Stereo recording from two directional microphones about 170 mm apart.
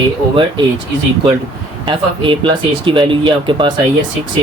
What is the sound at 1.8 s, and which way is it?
Speech, 30° right (ahead or behind).